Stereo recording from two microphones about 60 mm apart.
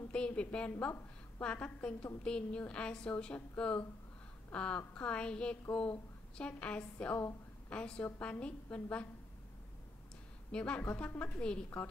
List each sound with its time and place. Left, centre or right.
0.1 s a woman's voice: centre
10.5 s a woman's voice: centre
11.0 s a woman's voice: left